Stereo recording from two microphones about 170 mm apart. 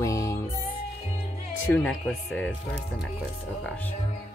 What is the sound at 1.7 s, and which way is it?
Speech, 5° left (ahead or behind).